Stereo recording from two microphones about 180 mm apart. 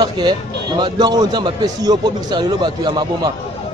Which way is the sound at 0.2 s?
25° right (ahead or behind).